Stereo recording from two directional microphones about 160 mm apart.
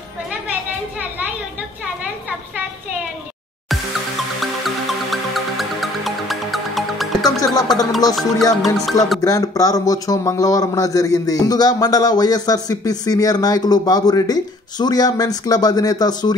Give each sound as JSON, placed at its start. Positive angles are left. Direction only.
{"t": 4.4, "sound": "music", "side_deg": 0}
{"t": 7.2, "sound": "music", "side_deg": 20}
{"t": 8.1, "sound": "music", "side_deg": 0}
{"t": 9.2, "sound": "a man's voice", "side_deg": 20}